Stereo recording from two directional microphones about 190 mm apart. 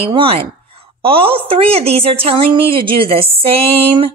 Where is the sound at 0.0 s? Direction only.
30° right (ahead or behind).